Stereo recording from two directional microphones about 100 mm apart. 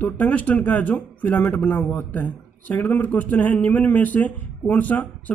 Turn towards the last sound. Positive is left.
turn(degrees=15)  # may be behind; listen again after turning